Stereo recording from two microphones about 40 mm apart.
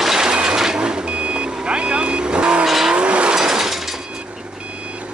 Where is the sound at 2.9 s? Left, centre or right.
Right.